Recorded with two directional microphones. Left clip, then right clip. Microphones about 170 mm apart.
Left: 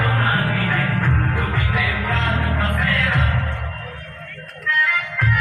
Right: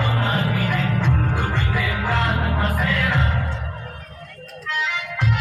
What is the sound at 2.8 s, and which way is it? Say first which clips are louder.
Music: left 2 dB; 45° right (ahead or behind).